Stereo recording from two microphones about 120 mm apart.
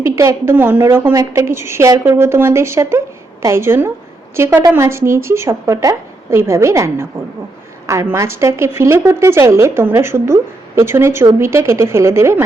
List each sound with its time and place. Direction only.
0.0 s a woman's voice: 25° right (ahead or behind)